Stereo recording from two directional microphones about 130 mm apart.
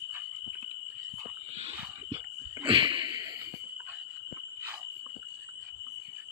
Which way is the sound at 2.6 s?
40° right (ahead or behind).